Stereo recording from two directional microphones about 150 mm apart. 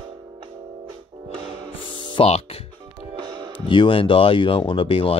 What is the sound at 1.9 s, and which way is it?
Music, 30° left (ahead or behind).